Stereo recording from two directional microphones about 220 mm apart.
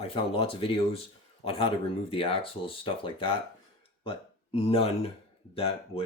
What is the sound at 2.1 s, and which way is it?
Speech, 25° left (ahead or behind).